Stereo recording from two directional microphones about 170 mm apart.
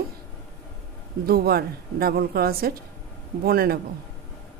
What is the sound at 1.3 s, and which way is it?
A woman's voice, 65° right (ahead or behind).